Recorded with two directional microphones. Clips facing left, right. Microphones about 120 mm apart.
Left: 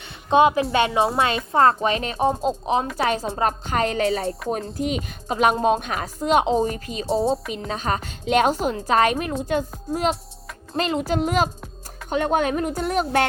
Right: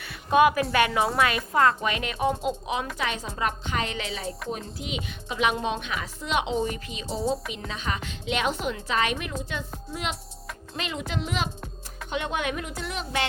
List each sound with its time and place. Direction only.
0.3 s a woman's voice: 25° left (ahead or behind); by 7.1 s 40° left (ahead or behind)
7.1 s a woman's voice: 30° left (ahead or behind)
7.7 s speech: 40° left (ahead or behind)